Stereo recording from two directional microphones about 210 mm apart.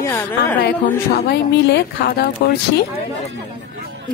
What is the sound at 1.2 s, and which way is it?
Speech, 50° left (ahead or behind).